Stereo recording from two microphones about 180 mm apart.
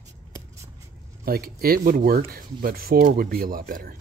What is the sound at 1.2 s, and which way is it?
Speech, 55° right (ahead or behind).